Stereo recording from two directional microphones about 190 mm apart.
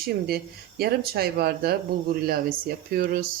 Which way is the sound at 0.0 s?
55° right (ahead or behind).